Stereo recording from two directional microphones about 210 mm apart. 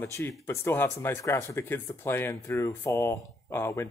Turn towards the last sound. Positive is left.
turn(degrees=10)  # may be behind; listen again after turning